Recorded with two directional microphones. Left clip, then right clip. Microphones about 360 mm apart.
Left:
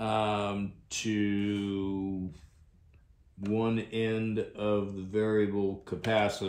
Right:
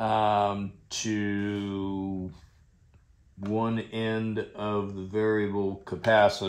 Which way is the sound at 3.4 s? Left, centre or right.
Centre.